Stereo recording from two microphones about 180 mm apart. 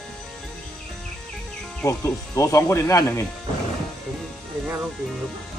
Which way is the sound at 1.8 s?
15° left (ahead or behind).